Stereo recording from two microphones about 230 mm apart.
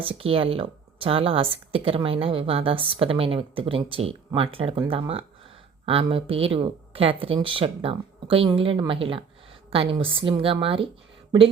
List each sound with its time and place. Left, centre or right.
0.0 s speech: right